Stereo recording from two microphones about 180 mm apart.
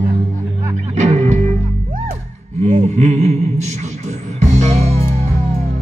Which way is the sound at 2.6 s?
40° right (ahead or behind).